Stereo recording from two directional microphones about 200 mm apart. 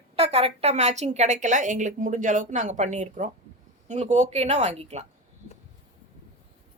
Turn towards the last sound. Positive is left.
turn(degrees=-35)  # may be behind; listen again after turning